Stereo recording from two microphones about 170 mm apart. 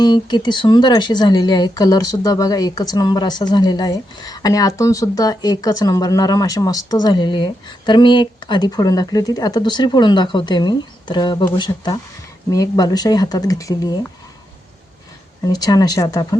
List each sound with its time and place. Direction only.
0.0 s speech: 25° left (ahead or behind)
15.4 s speech: 20° left (ahead or behind)